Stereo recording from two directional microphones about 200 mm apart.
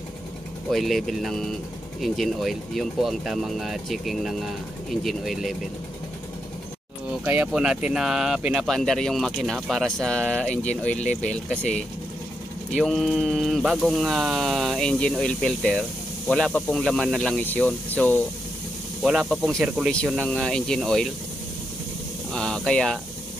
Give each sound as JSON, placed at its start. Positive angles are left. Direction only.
{"t": 0.7, "sound": "speech", "side_deg": 0}
{"t": 7.1, "sound": "speech", "side_deg": -5}
{"t": 11.0, "sound": "speech", "side_deg": 35}
{"t": 11.3, "sound": "speech", "side_deg": 5}
{"t": 22.3, "sound": "speech", "side_deg": 5}